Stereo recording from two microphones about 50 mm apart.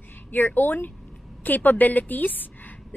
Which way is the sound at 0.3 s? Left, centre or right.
Left.